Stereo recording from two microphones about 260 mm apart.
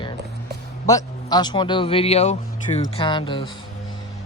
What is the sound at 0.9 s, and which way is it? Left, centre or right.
A man's voice, centre.